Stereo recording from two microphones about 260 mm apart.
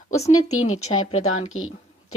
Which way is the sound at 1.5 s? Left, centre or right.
Left.